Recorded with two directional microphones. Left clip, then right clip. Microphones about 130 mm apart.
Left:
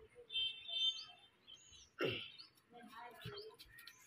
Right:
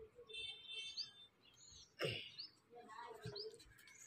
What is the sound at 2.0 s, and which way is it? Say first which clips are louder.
Bird: left 3 dB; 20° left (ahead or behind).